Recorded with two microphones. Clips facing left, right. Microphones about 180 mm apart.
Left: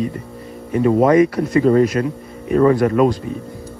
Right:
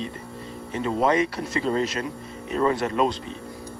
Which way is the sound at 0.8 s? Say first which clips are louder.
Left 11 dB; 50° left (ahead or behind).